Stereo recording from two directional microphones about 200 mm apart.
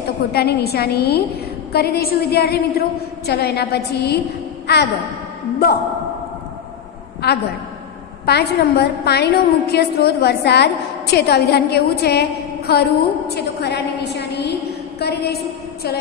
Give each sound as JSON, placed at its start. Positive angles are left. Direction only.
{"t": 0.3, "sound": "a woman's voice", "side_deg": 55}
{"t": 7.2, "sound": "a woman's voice", "side_deg": 55}